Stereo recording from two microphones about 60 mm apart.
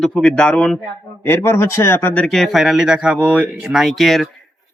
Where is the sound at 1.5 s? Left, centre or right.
Left.